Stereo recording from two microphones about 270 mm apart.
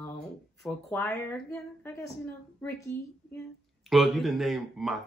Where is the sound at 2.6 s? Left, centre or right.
Centre.